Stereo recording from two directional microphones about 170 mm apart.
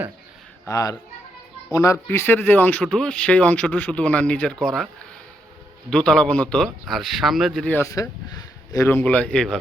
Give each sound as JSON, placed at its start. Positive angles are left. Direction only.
{"t": 0.7, "sound": "a child's voice", "side_deg": 20}
{"t": 5.9, "sound": "a man's voice", "side_deg": 5}